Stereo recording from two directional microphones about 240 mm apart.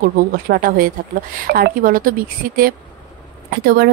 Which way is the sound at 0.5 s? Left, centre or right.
Right.